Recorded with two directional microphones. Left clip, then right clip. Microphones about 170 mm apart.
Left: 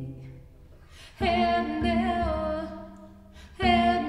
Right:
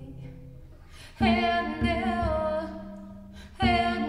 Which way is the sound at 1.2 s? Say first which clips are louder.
Left 1 dB; 15° left (ahead or behind).